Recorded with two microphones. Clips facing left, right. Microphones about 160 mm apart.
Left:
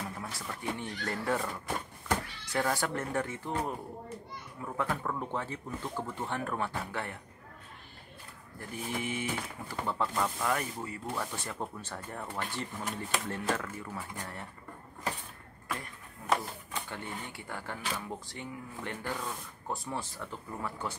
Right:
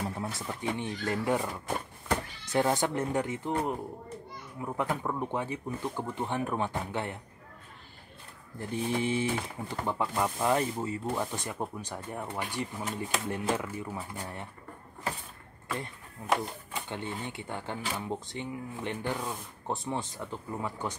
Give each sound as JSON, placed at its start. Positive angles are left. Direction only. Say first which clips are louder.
{"t": 0.4, "sound": "speech", "louder": "right 1 dB", "side_deg": -20}
{"t": 2.4, "sound": "speech", "louder": "right 7 dB", "side_deg": -20}
{"t": 8.5, "sound": "speech", "louder": "right 6 dB", "side_deg": -25}
{"t": 9.8, "sound": "speech", "louder": "right 2 dB", "side_deg": -15}
{"t": 16.3, "sound": "speech", "louder": "right 1 dB", "side_deg": -15}